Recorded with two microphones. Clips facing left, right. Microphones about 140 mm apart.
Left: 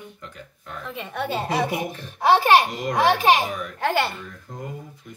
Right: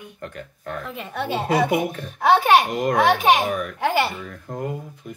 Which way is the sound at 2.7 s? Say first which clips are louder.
Right 2 dB; 55° right (ahead or behind).